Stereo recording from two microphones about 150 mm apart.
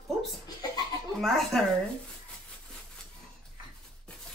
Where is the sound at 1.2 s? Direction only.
Centre (ahead or behind).